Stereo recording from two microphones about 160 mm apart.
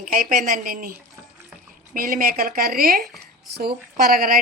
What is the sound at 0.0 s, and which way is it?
A woman's voice, 55° right (ahead or behind).